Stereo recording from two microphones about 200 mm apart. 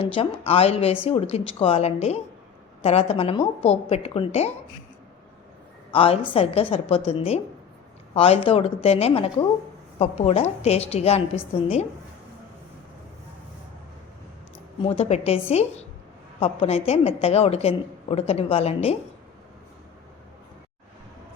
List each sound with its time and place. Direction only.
0.0 s a woman's voice: 30° left (ahead or behind)
5.9 s a woman's voice: 25° left (ahead or behind)
14.8 s a woman's voice: 30° left (ahead or behind)